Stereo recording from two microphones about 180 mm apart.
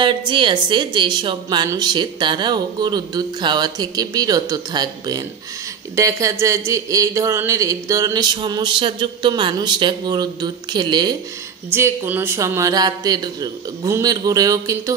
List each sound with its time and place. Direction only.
0.3 s a woman's voice: 25° right (ahead or behind)
11.7 s a woman's voice: 15° right (ahead or behind)